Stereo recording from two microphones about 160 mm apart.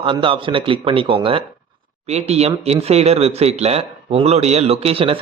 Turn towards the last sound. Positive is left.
turn(degrees=-35)  # may be behind; listen again after turning